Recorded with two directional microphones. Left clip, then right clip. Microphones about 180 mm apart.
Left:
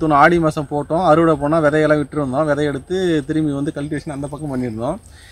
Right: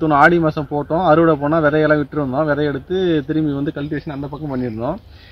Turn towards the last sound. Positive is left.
turn(degrees=20)  # may be behind; listen again after turning